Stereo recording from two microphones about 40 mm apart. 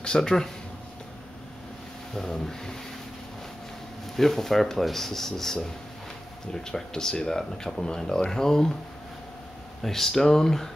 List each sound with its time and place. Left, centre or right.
0.0 s speech: centre
2.1 s speech: centre
4.2 s speech: centre
6.6 s speech: centre
9.8 s speech: centre